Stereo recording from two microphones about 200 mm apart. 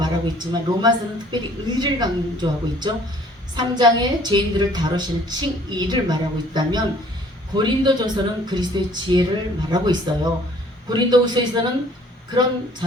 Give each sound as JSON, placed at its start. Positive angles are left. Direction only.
{"t": 0.0, "sound": "a woman's voice", "side_deg": -20}